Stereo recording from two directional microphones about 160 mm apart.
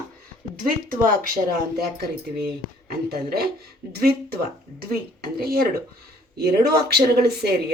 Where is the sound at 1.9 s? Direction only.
75° right (ahead or behind).